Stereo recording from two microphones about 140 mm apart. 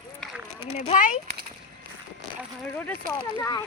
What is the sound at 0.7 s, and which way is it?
Speech, 60° left (ahead or behind).